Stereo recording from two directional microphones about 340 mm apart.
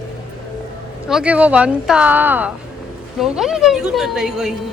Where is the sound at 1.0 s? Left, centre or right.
Centre.